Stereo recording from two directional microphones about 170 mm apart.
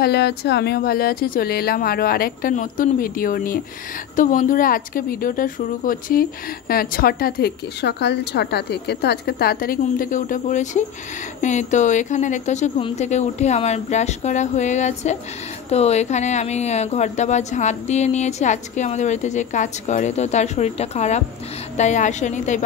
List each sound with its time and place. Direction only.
0.0 s a woman's voice: 75° left (ahead or behind); by 22.6 s 45° left (ahead or behind)